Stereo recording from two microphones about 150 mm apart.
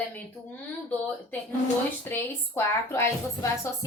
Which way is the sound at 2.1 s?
15° left (ahead or behind).